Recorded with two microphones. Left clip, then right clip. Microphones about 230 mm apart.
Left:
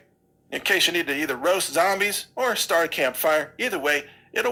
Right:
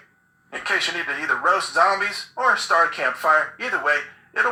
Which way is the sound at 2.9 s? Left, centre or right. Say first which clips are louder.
Right 2 dB; left.